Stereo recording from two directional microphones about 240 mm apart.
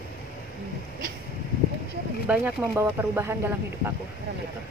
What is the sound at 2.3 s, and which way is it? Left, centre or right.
Speech, centre.